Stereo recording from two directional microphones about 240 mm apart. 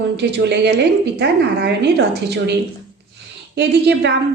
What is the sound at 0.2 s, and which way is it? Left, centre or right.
Speech, right.